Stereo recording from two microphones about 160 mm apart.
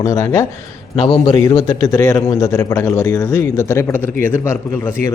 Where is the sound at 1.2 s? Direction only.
30° left (ahead or behind).